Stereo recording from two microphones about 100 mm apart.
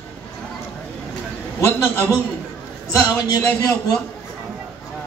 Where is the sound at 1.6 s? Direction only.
25° left (ahead or behind).